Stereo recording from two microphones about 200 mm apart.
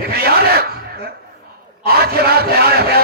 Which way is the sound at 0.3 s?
50° right (ahead or behind).